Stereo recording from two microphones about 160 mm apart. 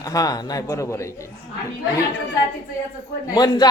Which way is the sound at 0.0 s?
20° left (ahead or behind).